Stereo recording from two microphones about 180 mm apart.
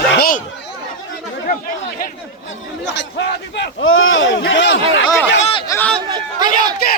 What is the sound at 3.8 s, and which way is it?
Speech, 90° left.